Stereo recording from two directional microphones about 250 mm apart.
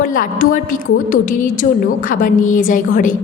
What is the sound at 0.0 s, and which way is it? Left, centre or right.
A woman's voice, left.